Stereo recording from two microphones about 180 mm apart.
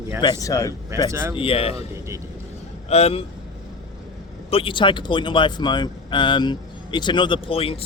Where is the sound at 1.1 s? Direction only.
15° right (ahead or behind).